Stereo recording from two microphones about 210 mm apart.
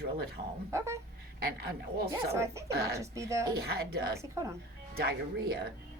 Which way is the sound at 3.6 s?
50° right (ahead or behind).